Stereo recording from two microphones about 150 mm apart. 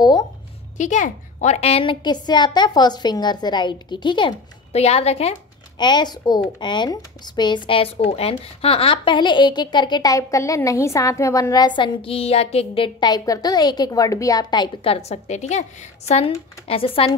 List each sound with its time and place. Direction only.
0.0 s speech: 25° left (ahead or behind)
0.7 s speech: 55° left (ahead or behind); by 4.3 s 30° left (ahead or behind)
4.7 s a woman's voice: 45° left (ahead or behind)
5.8 s speech: 30° left (ahead or behind)